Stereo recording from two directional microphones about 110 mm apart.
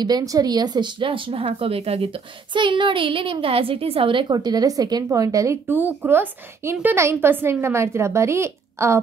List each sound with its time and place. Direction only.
0.0 s a woman's voice: 35° right (ahead or behind); by 2.0 s 60° right (ahead or behind)
2.5 s a woman's voice: 45° right (ahead or behind); by 5.6 s 30° right (ahead or behind)
5.7 s a woman's voice: 15° right (ahead or behind)